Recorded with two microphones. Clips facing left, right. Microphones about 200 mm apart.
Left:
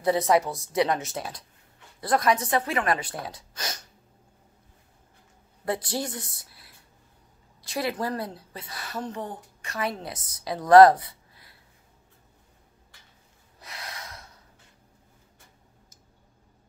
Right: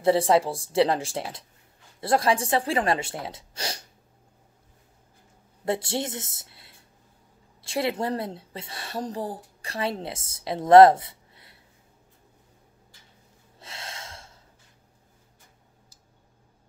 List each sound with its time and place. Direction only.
0.0 s a woman's voice: 30° right (ahead or behind)
5.7 s a woman's voice: 25° right (ahead or behind)
13.6 s snort: 25° right (ahead or behind)